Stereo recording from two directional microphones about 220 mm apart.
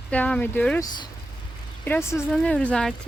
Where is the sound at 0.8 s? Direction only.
15° left (ahead or behind).